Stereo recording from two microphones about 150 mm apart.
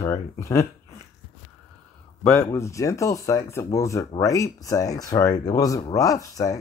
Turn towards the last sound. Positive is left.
turn(degrees=20)  # may be behind; listen again after turning